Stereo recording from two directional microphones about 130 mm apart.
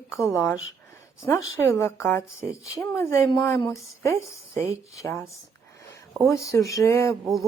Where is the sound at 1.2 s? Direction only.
20° left (ahead or behind).